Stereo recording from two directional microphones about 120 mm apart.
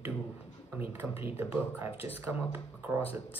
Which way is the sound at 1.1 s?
55° left (ahead or behind).